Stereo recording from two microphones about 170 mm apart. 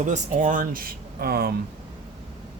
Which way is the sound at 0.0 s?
45° right (ahead or behind).